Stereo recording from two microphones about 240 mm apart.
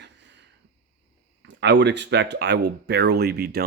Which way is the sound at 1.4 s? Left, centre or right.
Right.